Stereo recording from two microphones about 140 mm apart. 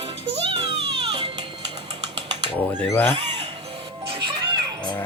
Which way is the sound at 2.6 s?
15° left (ahead or behind).